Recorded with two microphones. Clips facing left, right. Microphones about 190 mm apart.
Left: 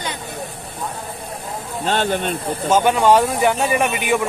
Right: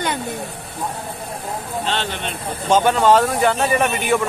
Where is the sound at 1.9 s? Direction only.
45° left (ahead or behind).